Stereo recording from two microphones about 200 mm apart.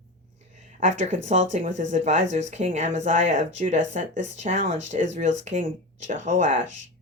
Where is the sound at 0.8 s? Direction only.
35° right (ahead or behind).